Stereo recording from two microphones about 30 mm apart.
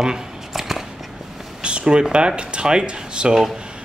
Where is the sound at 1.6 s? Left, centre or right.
Right.